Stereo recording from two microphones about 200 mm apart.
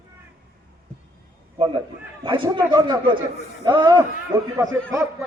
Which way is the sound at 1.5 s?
25° right (ahead or behind).